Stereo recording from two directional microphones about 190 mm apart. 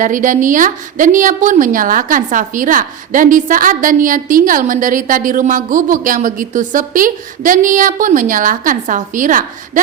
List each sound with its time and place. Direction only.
0.0 s a woman's voice: 45° right (ahead or behind)